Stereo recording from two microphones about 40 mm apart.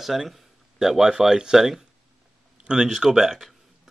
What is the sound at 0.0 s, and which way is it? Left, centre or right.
Speech, centre.